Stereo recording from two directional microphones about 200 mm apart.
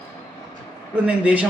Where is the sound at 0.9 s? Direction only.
5° right (ahead or behind).